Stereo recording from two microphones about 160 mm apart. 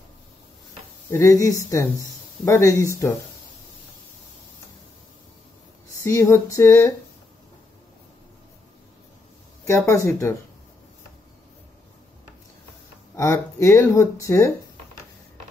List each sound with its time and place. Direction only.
1.1 s speech: 20° left (ahead or behind)
5.9 s speech: 15° left (ahead or behind)
9.7 s speech: 20° left (ahead or behind)
13.1 s speech: 20° left (ahead or behind)